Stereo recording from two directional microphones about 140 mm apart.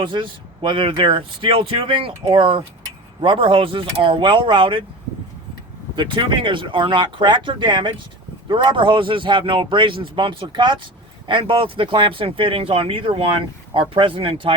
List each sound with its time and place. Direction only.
0.0 s a man's voice: 35° right (ahead or behind)
6.0 s a man's voice: 35° right (ahead or behind)